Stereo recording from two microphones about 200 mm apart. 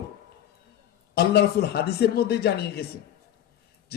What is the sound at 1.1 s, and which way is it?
Speech, 55° left (ahead or behind).